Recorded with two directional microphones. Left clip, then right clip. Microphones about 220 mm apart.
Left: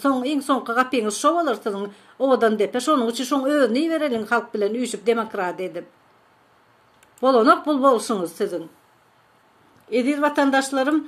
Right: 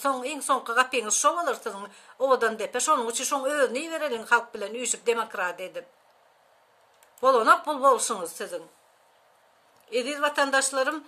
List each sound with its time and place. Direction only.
0.0 s speech: 15° right (ahead or behind)
7.2 s speech: 15° right (ahead or behind)
9.8 s speech: 15° right (ahead or behind)